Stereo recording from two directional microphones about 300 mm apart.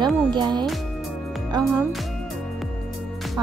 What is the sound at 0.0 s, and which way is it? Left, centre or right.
Music, centre.